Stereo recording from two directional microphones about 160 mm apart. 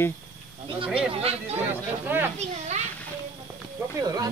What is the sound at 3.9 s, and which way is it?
Speech, 20° right (ahead or behind).